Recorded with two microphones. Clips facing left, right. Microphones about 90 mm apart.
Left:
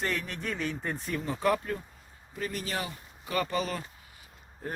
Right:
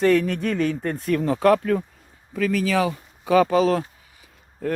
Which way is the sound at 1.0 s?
70° right (ahead or behind).